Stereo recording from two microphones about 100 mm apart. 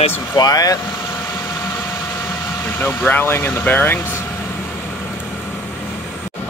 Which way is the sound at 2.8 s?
20° left (ahead or behind).